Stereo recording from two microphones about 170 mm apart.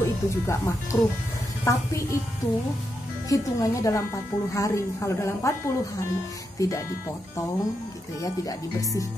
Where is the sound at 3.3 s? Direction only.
20° left (ahead or behind).